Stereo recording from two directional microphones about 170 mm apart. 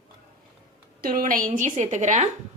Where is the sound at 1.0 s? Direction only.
55° right (ahead or behind).